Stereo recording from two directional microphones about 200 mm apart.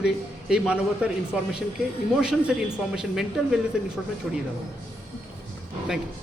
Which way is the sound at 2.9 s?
5° right (ahead or behind).